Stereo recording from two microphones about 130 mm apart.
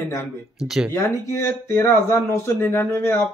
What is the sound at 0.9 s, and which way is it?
Speech, 20° left (ahead or behind).